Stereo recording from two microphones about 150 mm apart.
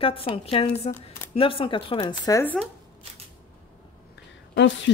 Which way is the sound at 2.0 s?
20° left (ahead or behind).